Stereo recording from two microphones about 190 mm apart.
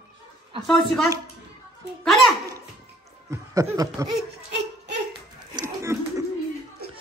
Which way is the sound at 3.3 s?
15° right (ahead or behind).